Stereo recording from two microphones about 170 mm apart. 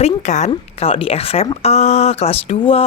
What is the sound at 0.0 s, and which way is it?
A woman's voice, 45° left (ahead or behind).